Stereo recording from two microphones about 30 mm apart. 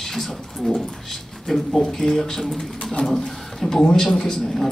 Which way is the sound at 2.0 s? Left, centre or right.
Centre.